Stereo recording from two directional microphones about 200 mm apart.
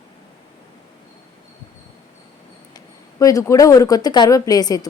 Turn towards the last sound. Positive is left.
turn(degrees=20)  # may be behind; listen again after turning